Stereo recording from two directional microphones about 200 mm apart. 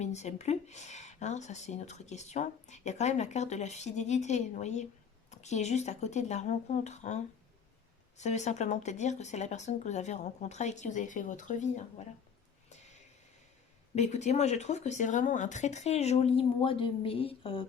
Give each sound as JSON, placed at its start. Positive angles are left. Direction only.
{"t": 0.0, "sound": "speech", "side_deg": 35}
{"t": 8.2, "sound": "speech", "side_deg": 35}
{"t": 13.9, "sound": "speech", "side_deg": 35}